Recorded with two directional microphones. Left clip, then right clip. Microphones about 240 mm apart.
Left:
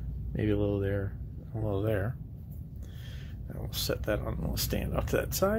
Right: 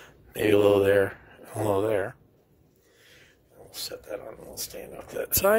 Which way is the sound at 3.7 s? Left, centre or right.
Centre.